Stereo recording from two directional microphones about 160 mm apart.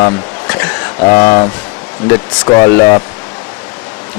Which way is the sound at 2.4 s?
25° left (ahead or behind).